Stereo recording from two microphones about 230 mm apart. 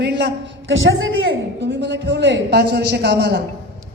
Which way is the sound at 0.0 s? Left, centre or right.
Right.